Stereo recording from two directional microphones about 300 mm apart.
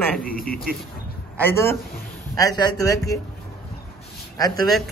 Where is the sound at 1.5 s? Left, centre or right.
Centre.